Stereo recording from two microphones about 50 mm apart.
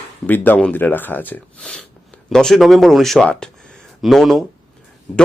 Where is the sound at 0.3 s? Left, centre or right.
Left.